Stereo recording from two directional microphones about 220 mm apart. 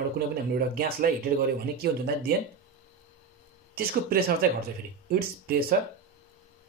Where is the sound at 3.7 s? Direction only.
40° right (ahead or behind).